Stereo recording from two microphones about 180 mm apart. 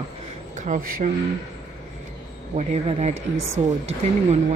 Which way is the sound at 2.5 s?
35° right (ahead or behind).